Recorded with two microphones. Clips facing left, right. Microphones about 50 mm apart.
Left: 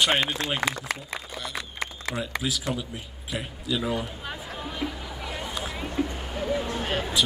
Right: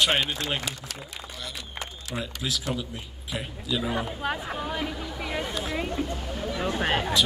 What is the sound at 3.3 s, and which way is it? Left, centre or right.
Speech, centre.